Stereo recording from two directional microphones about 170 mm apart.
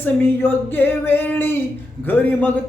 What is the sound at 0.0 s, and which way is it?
Music, 10° left (ahead or behind).